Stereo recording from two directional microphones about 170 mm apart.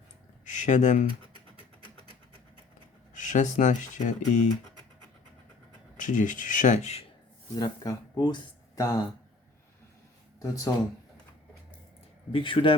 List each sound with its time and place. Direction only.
0.4 s speech: 45° left (ahead or behind)
3.2 s speech: 45° left (ahead or behind)
6.0 s speech: 50° left (ahead or behind)
7.5 s speech: 20° left (ahead or behind)
10.4 s speech: 20° left (ahead or behind)
12.3 s speech: 30° left (ahead or behind)